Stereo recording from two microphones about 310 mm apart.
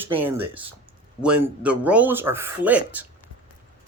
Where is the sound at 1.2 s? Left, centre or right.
Centre.